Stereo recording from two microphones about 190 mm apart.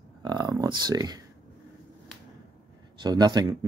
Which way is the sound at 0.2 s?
20° right (ahead or behind).